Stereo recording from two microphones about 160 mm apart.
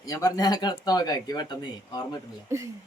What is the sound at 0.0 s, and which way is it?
Speech, 20° left (ahead or behind).